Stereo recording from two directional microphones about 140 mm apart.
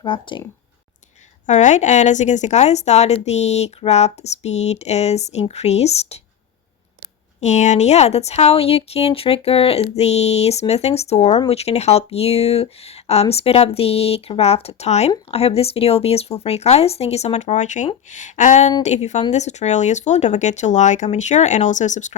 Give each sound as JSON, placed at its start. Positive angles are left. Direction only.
{"t": 0.0, "sound": "speech", "side_deg": 35}
{"t": 1.5, "sound": "a woman's voice", "side_deg": 60}
{"t": 7.4, "sound": "a woman's voice", "side_deg": 55}